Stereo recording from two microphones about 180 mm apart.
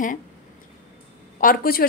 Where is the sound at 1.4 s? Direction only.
55° left (ahead or behind).